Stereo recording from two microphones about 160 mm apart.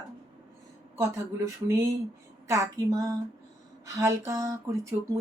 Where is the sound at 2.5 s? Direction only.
20° right (ahead or behind).